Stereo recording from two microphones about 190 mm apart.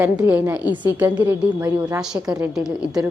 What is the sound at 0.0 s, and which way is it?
A woman's voice, 10° right (ahead or behind).